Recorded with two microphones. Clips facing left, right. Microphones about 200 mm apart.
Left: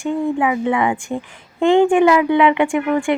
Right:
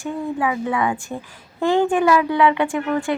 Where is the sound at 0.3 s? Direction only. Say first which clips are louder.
Left 4 dB; 20° left (ahead or behind).